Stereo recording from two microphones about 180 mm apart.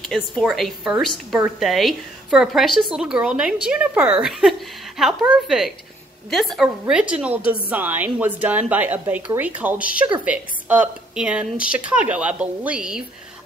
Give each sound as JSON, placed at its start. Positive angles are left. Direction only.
{"t": 0.0, "sound": "a woman's voice", "side_deg": 0}
{"t": 11.5, "sound": "speech", "side_deg": 50}
{"t": 11.8, "sound": "a woman's voice", "side_deg": -5}